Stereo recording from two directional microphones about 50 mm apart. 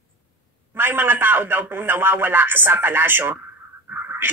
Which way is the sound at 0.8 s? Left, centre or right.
Right.